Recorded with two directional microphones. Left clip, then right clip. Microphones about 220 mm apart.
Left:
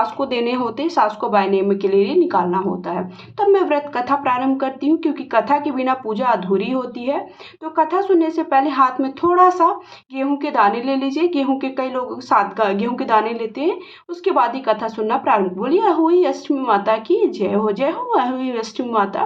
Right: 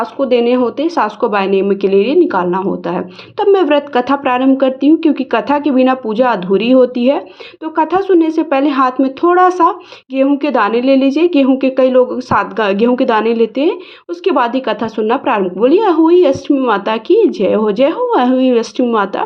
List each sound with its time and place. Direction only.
0.0 s speech: 10° right (ahead or behind)